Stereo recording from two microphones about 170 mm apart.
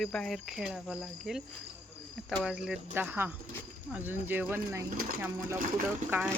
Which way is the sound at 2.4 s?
5° right (ahead or behind).